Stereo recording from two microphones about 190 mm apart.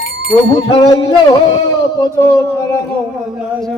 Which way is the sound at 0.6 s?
25° left (ahead or behind).